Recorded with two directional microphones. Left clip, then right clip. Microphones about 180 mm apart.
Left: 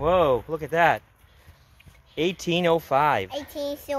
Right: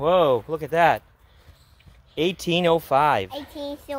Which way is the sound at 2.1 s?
10° right (ahead or behind).